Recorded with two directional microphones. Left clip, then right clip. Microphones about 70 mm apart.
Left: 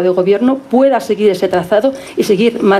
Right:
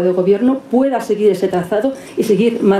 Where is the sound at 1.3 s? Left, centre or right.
Left.